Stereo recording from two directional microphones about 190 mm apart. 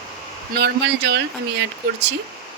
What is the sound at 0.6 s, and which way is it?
Speech, 60° right (ahead or behind).